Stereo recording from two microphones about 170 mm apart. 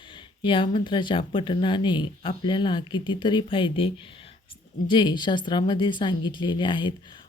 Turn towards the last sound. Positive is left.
turn(degrees=30)  # may be behind; listen again after turning